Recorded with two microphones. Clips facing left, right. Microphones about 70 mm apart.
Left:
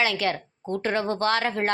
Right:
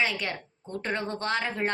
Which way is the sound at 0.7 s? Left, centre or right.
Left.